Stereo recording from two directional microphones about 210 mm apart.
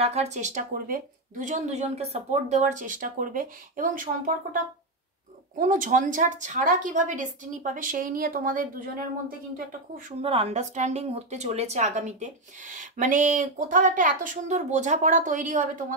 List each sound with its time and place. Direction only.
0.0 s speech: 30° right (ahead or behind)
5.6 s speech: 40° right (ahead or behind)
10.2 s speech: 25° right (ahead or behind)